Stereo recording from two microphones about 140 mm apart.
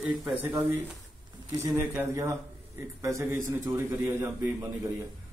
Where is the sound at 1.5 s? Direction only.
20° right (ahead or behind).